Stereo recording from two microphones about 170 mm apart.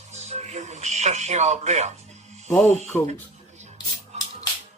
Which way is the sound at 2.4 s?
10° left (ahead or behind).